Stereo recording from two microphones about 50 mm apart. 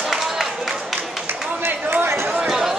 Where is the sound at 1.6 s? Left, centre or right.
Right.